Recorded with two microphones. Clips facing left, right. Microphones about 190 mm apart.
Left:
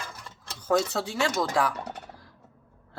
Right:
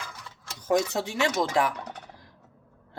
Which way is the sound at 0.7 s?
20° right (ahead or behind).